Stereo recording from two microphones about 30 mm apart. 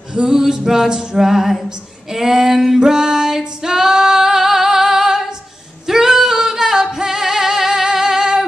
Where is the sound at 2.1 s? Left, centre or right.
Centre.